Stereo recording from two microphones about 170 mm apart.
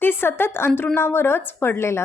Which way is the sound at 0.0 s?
15° left (ahead or behind).